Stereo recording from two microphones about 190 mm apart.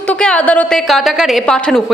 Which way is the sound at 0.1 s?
5° left (ahead or behind).